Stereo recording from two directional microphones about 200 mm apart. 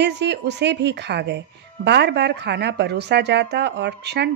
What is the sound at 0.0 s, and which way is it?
A woman's voice, 60° right (ahead or behind).